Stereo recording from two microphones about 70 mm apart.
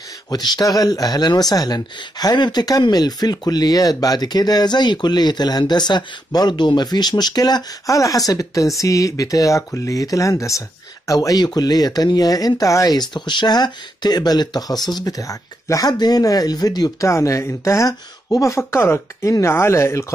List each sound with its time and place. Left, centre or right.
0.3 s speech: left
7.8 s speech: left
12.9 s speech: left
15.9 s speech: left
17.1 s speech: left
17.8 s speech: left